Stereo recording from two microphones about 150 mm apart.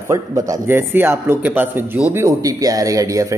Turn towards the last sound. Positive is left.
turn(degrees=-20)  # may be behind; listen again after turning